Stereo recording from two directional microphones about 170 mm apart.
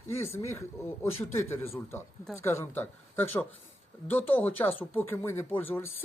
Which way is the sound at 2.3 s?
15° left (ahead or behind).